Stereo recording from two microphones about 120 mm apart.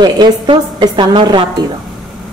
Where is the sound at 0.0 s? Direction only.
40° right (ahead or behind).